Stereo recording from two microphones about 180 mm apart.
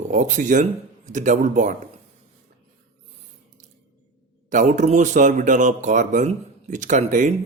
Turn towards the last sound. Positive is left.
turn(degrees=-45)  # may be behind; listen again after turning